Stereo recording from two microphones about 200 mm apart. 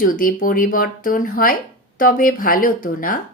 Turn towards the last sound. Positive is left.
turn(degrees=45)  # may be behind; listen again after turning